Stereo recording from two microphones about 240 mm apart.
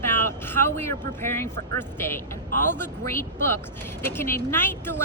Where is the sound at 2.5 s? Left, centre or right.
Left.